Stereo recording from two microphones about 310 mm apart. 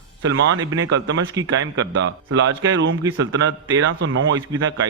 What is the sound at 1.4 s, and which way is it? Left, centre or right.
A man's voice, right.